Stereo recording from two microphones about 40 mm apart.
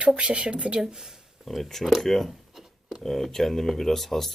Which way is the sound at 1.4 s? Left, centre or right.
Centre.